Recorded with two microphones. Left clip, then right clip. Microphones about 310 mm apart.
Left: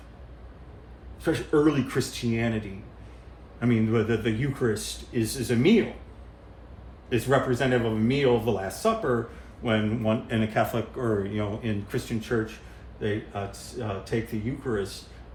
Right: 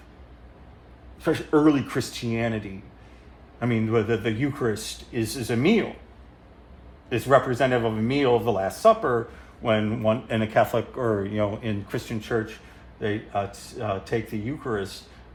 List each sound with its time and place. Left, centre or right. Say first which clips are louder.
1.2 s a man's voice: right 2 dB; centre
7.1 s a man's voice: right 4 dB; centre